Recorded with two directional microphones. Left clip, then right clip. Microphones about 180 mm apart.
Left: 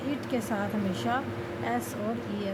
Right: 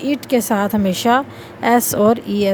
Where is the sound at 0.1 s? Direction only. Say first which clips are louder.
Right 15 dB; 65° right (ahead or behind).